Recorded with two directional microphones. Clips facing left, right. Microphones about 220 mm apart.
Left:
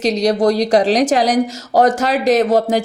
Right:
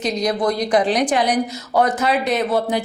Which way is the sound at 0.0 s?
80° left.